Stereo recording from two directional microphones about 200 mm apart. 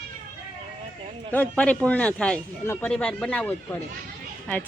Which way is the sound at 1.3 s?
5° left (ahead or behind).